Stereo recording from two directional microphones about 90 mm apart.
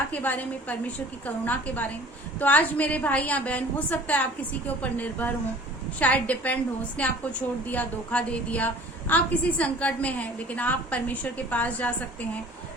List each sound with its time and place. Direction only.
0.1 s a woman's voice: 20° left (ahead or behind)